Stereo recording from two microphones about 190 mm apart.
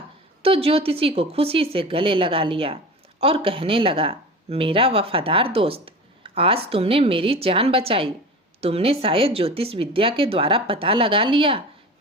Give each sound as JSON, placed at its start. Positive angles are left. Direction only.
{"t": 0.4, "sound": "speech", "side_deg": -30}